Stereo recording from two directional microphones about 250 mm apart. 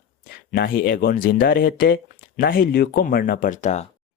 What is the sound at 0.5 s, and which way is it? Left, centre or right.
Speech, left.